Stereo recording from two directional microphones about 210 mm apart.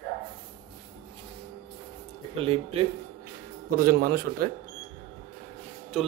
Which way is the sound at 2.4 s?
25° right (ahead or behind).